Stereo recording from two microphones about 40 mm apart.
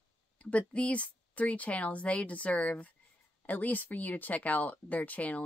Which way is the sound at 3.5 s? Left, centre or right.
Left.